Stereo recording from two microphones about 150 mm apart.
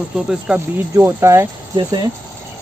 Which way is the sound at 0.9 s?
20° right (ahead or behind).